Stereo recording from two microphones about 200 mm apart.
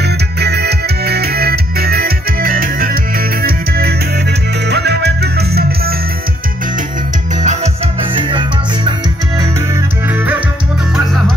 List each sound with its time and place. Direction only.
0.0 s music: 55° right (ahead or behind)
7.4 s music: 30° right (ahead or behind)